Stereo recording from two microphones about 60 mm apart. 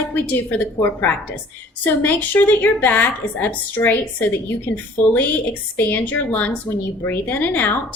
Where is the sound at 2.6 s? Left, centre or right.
Left.